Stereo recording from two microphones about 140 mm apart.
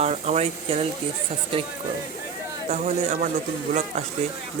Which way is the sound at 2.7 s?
55° right (ahead or behind).